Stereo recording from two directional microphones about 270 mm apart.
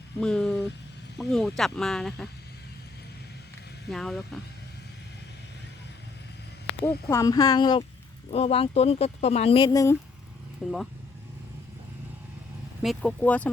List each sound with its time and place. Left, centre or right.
0.2 s speech: centre
3.8 s speech: centre
6.8 s speech: centre
10.6 s speech: centre
12.8 s speech: centre